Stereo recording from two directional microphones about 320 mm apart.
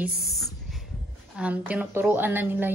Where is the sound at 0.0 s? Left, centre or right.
Centre.